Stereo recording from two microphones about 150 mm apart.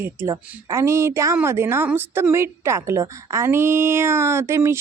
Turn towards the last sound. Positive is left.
turn(degrees=-20)  # may be behind; listen again after turning